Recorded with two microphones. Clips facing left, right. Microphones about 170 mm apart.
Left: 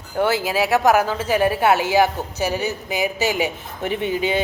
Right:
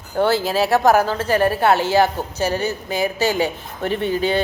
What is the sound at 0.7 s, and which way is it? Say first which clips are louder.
Speech: right 1 dB; 35° right (ahead or behind).